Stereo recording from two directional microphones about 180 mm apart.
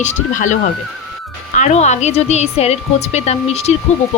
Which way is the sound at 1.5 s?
40° left (ahead or behind).